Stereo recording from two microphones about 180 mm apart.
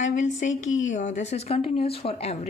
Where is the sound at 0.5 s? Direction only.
90° left.